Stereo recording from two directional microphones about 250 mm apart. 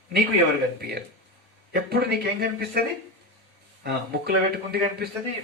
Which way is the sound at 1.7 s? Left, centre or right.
Right.